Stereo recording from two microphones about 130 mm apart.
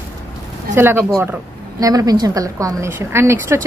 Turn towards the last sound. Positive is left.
turn(degrees=-20)  # may be behind; listen again after turning